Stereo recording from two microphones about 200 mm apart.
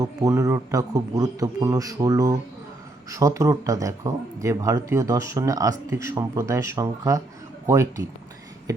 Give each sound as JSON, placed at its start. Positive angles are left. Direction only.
{"t": 0.0, "sound": "speech", "side_deg": -15}